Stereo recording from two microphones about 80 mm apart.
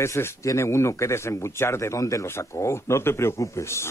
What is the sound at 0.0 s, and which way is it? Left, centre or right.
A man's voice, left.